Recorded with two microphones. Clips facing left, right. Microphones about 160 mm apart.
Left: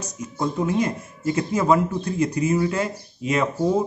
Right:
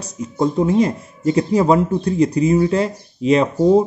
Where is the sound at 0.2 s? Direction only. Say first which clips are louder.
Right 7 dB; 30° right (ahead or behind).